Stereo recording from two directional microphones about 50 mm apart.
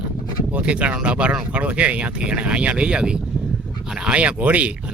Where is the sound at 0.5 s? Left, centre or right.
Right.